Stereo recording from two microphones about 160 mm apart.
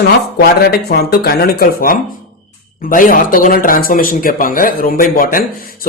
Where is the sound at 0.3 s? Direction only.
80° left.